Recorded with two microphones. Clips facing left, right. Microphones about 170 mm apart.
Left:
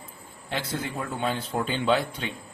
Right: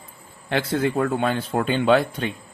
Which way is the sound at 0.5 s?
65° right (ahead or behind).